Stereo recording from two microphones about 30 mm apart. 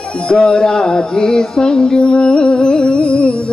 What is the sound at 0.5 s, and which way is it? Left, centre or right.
Music, left.